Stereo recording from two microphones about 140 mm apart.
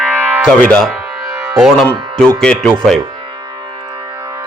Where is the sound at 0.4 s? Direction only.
5° left (ahead or behind).